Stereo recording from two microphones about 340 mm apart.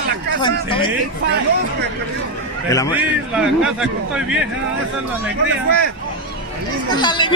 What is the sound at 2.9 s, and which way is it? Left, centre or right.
A man's voice, centre.